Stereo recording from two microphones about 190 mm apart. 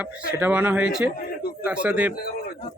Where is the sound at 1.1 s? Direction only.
55° left (ahead or behind).